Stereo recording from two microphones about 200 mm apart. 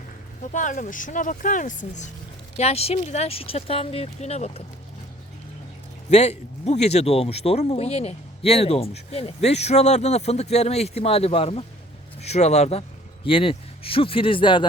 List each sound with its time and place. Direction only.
0.5 s speech: 40° left (ahead or behind)
6.1 s speech: 35° left (ahead or behind)